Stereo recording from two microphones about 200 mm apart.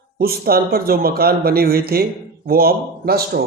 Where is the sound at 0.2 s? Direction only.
50° right (ahead or behind).